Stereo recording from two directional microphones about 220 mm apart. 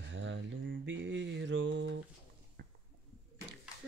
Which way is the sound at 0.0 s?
55° right (ahead or behind).